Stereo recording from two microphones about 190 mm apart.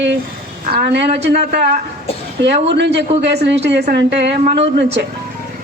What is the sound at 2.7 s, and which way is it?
A woman's voice, 65° right (ahead or behind).